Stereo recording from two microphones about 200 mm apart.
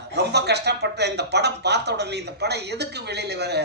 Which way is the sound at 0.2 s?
55° right (ahead or behind).